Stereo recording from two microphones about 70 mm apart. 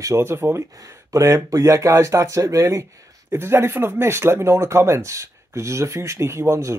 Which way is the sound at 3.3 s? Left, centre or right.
Right.